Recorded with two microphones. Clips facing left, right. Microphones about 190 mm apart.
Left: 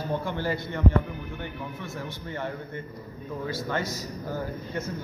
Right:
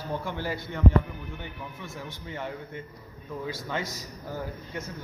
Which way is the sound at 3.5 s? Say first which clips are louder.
Left 4 dB; 15° right (ahead or behind).